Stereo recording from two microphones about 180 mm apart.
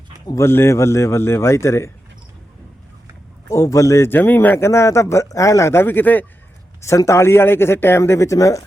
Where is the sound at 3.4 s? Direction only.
15° left (ahead or behind).